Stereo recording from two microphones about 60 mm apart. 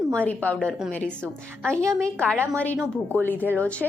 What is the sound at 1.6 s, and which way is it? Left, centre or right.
Speech, centre.